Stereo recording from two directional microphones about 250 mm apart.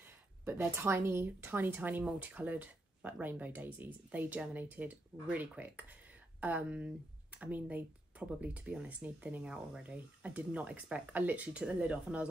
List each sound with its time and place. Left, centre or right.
0.7 s speech: centre